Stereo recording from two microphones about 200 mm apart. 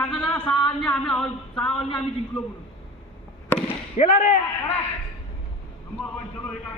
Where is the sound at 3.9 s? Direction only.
45° left (ahead or behind).